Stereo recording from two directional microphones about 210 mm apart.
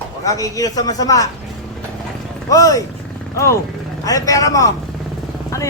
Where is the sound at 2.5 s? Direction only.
15° left (ahead or behind).